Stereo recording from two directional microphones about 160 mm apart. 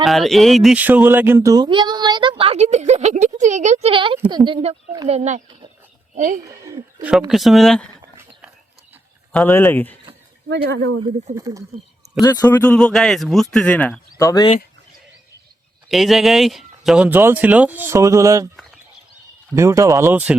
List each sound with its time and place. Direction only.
0.0 s speech: centre (ahead or behind); by 4.8 s 35° right (ahead or behind)
5.0 s speech: 45° right (ahead or behind)
6.5 s speech: 20° right (ahead or behind)
7.3 s a man's voice: centre (ahead or behind)
9.3 s speech: 10° left (ahead or behind)
11.3 s speech: 20° right (ahead or behind)
12.2 s a man's voice: 25° left (ahead or behind)
12.5 s a man's voice: 10° left (ahead or behind)
15.9 s speech: centre (ahead or behind); by 18.4 s 20° right (ahead or behind)
19.5 s speech: 20° right (ahead or behind)